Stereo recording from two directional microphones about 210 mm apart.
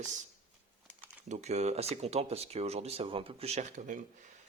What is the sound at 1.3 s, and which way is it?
Speech, 30° right (ahead or behind).